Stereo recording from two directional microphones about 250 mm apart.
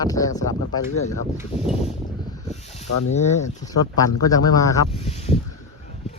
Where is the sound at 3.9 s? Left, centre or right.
Centre.